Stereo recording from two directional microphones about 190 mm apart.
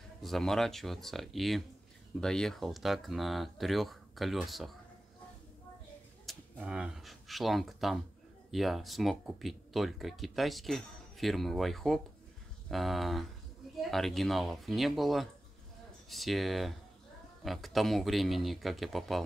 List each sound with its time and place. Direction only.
0.2 s speech: centre (ahead or behind)
6.2 s speech: 5° right (ahead or behind)